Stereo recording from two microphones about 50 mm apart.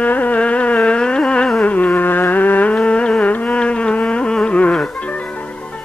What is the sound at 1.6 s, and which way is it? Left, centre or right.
Music, left.